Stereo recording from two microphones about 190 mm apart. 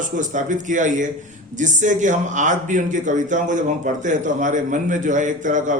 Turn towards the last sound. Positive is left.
turn(degrees=-40)  # may be behind; listen again after turning